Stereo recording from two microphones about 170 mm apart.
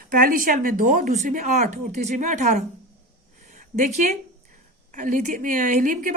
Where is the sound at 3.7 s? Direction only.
50° right (ahead or behind).